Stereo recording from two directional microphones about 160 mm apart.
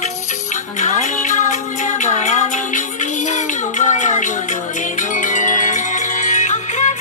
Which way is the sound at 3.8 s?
50° left (ahead or behind).